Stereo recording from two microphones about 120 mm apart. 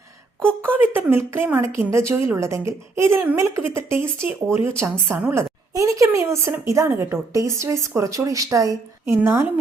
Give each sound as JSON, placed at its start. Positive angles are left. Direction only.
{"t": 0.4, "sound": "a woman's voice", "side_deg": -15}